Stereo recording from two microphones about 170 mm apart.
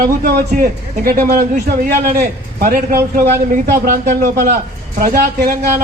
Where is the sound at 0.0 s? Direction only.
55° right (ahead or behind).